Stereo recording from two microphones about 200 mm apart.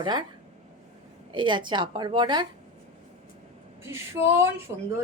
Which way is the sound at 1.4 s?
25° right (ahead or behind).